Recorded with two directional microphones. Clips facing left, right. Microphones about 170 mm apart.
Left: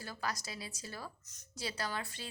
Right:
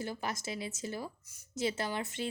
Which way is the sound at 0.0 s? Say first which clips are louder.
Right 4 dB; 25° right (ahead or behind).